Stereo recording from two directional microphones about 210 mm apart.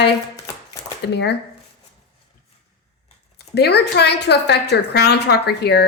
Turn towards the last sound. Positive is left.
turn(degrees=50)  # may be behind; listen again after turning